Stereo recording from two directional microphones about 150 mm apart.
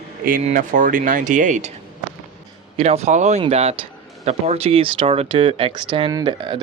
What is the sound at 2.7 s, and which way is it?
A man's voice, 45° right (ahead or behind).